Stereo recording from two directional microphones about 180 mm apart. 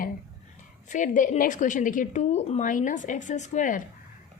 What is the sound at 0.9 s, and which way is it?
A woman's voice, 45° left (ahead or behind).